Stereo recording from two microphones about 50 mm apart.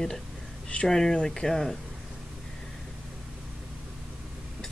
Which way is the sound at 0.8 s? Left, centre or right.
Centre.